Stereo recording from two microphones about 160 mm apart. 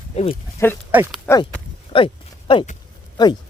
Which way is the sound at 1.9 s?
30° left (ahead or behind).